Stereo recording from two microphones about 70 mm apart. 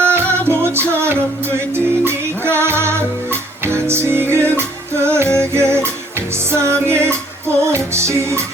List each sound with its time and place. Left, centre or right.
0.0 s music: right